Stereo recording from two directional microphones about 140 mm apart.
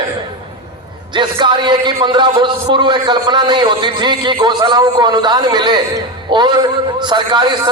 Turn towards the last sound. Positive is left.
turn(degrees=-35)  # may be behind; listen again after turning